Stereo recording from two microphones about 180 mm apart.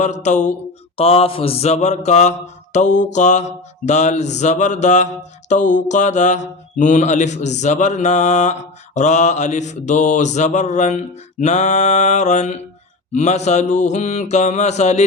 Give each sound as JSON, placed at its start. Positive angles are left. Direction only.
{"t": 0.0, "sound": "mantra", "side_deg": 40}
{"t": 0.9, "sound": "mantra", "side_deg": 30}